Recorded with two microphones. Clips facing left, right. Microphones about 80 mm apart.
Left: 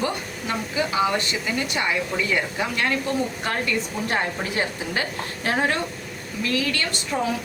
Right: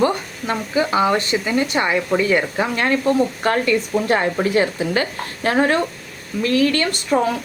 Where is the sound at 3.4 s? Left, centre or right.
Right.